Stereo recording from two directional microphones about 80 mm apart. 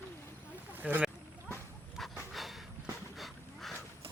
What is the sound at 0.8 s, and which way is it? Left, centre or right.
Speech, centre.